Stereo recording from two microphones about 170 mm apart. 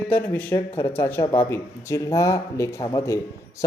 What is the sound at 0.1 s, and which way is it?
Speech, 10° left (ahead or behind).